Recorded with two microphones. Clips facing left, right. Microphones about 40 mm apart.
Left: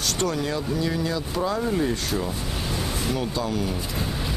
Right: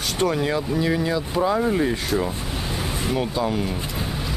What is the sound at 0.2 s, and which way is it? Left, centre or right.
Speech, centre.